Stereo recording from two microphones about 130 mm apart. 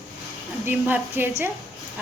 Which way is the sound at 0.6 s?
15° right (ahead or behind).